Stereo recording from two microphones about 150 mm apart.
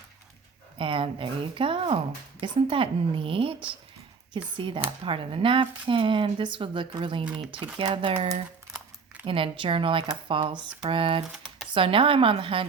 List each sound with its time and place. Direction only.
0.8 s speech: 35° right (ahead or behind)
11.3 s computer keyboard: centre (ahead or behind)
11.7 s speech: 35° right (ahead or behind)